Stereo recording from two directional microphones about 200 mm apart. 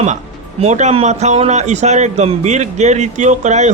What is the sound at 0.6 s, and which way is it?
A man's voice, 35° right (ahead or behind).